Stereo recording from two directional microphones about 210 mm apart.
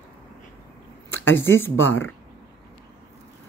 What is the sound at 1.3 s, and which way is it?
Speech, 10° left (ahead or behind).